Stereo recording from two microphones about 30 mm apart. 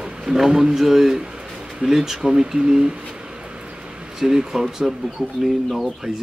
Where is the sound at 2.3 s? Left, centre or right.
Right.